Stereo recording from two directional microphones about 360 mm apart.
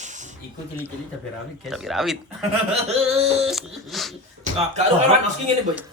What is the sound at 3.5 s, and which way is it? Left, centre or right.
Speech, centre.